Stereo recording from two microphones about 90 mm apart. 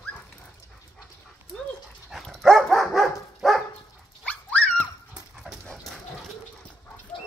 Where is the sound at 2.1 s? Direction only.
Centre (ahead or behind).